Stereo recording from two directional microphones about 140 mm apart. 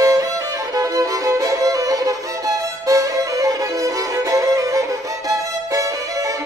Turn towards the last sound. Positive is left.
turn(degrees=-25)  # may be behind; listen again after turning